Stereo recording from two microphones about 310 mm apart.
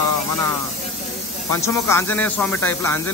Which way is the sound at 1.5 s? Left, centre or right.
Centre.